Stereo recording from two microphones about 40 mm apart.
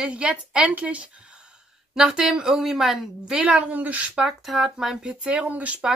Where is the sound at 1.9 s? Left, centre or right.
Centre.